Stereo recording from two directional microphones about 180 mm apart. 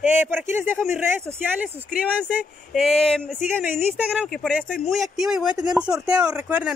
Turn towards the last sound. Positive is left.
turn(degrees=-5)  # may be behind; listen again after turning